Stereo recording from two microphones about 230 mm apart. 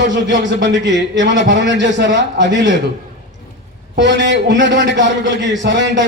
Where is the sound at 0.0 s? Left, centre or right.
Right.